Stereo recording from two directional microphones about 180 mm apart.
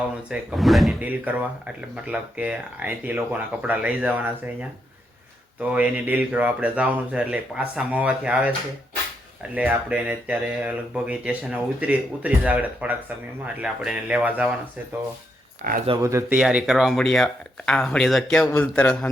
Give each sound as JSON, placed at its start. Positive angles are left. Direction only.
{"t": 0.3, "sound": "speech", "side_deg": 0}
{"t": 5.5, "sound": "speech", "side_deg": -10}
{"t": 9.6, "sound": "speech", "side_deg": -10}
{"t": 15.6, "sound": "speech", "side_deg": -50}
{"t": 16.0, "sound": "a man's voice", "side_deg": -15}